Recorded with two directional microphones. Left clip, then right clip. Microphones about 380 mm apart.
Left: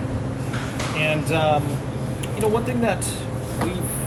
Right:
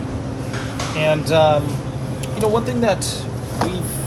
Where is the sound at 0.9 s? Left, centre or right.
Centre.